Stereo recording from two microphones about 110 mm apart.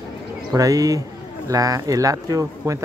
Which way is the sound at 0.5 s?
30° right (ahead or behind).